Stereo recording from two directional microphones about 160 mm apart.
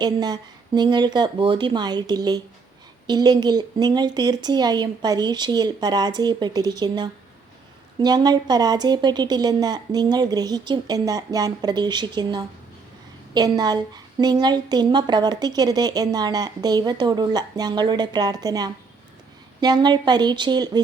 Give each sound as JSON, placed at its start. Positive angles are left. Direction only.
{"t": 0.0, "sound": "a woman's voice", "side_deg": -25}